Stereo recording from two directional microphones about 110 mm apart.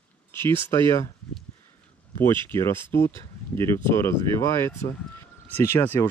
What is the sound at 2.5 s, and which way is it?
Speech, 25° left (ahead or behind).